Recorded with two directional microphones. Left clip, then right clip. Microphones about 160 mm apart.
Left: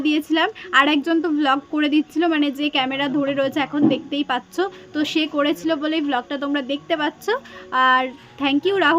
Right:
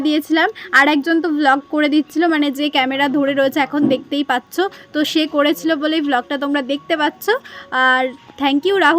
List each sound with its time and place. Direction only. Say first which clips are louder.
0.0 s a woman's voice: right 4 dB; 25° right (ahead or behind)